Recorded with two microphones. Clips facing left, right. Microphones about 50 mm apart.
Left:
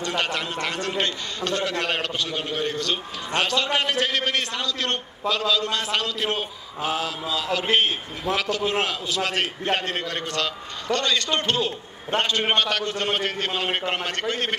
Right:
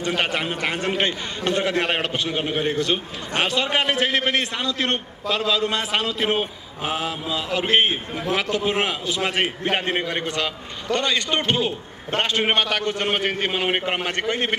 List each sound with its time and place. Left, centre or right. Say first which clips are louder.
0.0 s a man's voice: right 3 dB; centre